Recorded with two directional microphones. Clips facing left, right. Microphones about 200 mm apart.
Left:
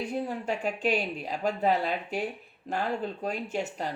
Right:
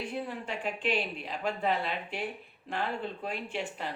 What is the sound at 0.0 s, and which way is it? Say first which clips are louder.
Speech: left 5 dB; 45° left (ahead or behind).